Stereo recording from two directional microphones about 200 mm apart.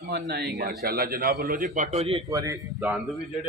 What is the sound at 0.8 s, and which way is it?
A man's voice, 50° right (ahead or behind).